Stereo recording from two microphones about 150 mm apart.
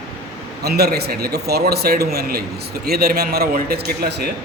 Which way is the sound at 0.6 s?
90° right.